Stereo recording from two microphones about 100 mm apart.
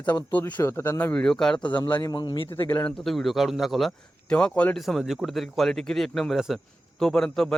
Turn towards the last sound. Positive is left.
turn(degrees=5)  # may be behind; listen again after turning